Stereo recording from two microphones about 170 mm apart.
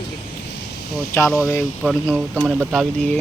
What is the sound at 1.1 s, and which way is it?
Speech, 15° left (ahead or behind).